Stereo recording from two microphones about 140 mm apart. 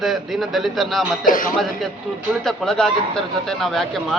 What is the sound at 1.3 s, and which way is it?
Speech, 75° left (ahead or behind).